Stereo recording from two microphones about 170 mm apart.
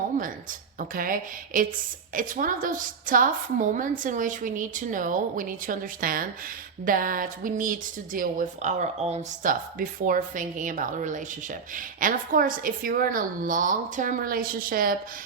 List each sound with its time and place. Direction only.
0.8 s a woman's voice: 55° right (ahead or behind)